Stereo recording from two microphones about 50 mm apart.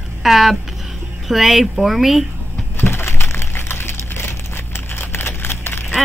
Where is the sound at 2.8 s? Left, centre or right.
Left.